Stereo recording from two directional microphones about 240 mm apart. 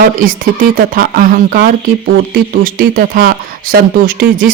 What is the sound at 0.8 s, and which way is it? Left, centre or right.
Speech, right.